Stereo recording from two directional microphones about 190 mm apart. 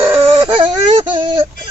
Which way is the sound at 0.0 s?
10° right (ahead or behind).